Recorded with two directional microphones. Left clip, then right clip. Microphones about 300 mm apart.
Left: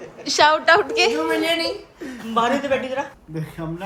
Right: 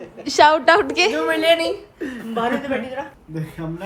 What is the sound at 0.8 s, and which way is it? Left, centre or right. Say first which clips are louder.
Speech: right 1 dB; right.